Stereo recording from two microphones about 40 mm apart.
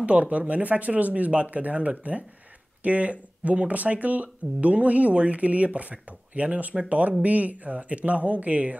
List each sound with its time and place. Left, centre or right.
0.0 s speech: right